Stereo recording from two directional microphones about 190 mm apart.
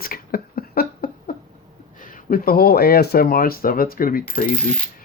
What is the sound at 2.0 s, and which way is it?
Speech, 45° left (ahead or behind).